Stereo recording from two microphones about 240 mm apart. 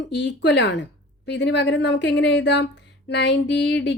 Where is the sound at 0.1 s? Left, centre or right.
Left.